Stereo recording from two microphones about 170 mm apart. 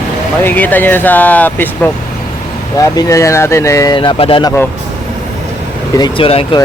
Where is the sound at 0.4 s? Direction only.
10° left (ahead or behind).